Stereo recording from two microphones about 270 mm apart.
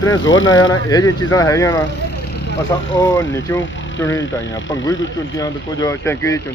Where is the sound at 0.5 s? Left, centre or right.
Centre.